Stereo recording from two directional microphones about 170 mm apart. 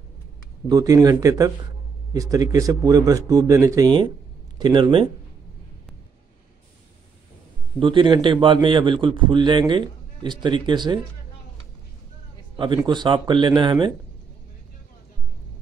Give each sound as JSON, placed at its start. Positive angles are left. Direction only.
{"t": 0.7, "sound": "a man's voice", "side_deg": -20}
{"t": 7.8, "sound": "a man's voice", "side_deg": -30}
{"t": 12.5, "sound": "a man's voice", "side_deg": -25}